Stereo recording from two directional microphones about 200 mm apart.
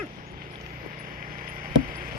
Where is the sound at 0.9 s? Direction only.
40° right (ahead or behind).